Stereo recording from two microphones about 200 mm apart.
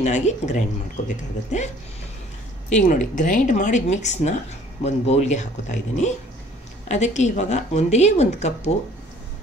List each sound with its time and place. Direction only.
0.0 s speech: 35° left (ahead or behind)
2.7 s speech: 40° left (ahead or behind)